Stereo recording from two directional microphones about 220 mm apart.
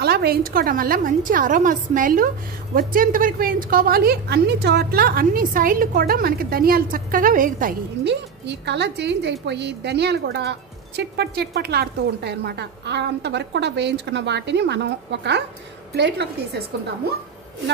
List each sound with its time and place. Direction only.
0.0 s a woman's voice: 45° right (ahead or behind)